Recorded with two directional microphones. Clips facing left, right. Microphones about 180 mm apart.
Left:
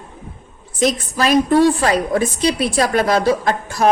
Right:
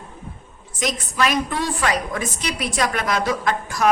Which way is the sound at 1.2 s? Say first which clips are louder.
Left 9 dB; 35° left (ahead or behind).